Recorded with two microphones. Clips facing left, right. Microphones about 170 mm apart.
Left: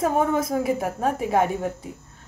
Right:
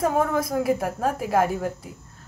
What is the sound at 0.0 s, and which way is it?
A woman's voice, centre (ahead or behind).